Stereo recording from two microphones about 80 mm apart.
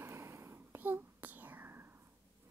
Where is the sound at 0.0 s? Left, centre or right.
Right.